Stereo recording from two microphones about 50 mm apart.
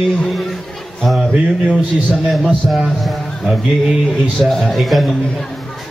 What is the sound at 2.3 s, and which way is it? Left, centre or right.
A man's voice, centre.